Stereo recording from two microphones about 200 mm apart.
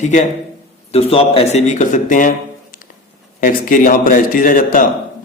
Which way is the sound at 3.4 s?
40° left (ahead or behind).